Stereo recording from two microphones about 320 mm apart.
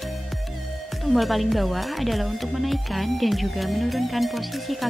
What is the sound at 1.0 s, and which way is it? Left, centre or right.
Speech, centre.